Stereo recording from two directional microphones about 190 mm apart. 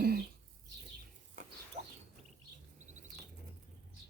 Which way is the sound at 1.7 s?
40° right (ahead or behind).